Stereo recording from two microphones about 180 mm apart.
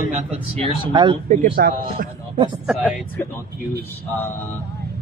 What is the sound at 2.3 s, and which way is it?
Speech, 25° right (ahead or behind).